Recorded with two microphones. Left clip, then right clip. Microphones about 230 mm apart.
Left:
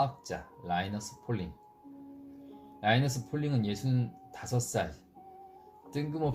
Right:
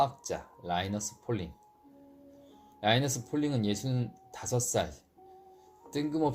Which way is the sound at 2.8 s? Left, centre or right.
Right.